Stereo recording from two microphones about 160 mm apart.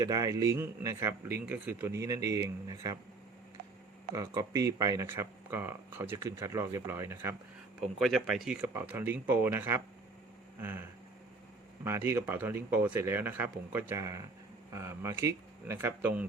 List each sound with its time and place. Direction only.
0.0 s a man's voice: 20° right (ahead or behind)
4.1 s speech: 20° right (ahead or behind)
7.8 s speech: centre (ahead or behind)
8.6 s speech: 15° right (ahead or behind)